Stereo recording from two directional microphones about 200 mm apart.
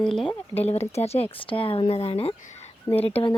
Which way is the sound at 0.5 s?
30° left (ahead or behind).